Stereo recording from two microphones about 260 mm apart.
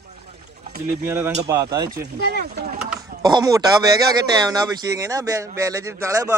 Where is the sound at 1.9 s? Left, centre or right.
Right.